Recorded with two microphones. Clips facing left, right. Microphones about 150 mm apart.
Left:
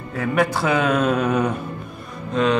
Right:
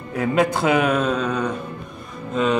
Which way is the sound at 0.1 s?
20° right (ahead or behind).